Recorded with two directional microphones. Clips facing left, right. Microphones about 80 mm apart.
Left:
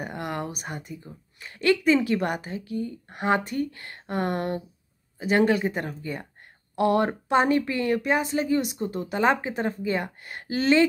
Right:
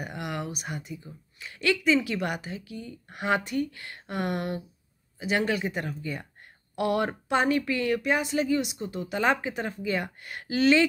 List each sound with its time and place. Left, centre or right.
0.0 s speech: left